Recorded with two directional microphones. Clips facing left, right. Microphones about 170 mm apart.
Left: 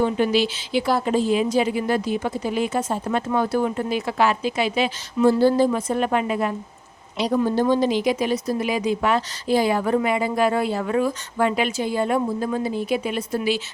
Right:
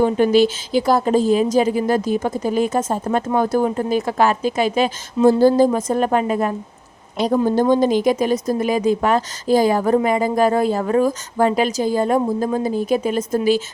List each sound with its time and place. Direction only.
0.0 s a woman's voice: 45° right (ahead or behind)